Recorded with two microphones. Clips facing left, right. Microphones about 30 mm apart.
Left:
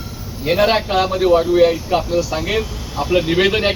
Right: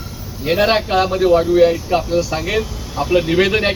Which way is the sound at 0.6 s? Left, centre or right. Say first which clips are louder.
Right 2 dB; centre.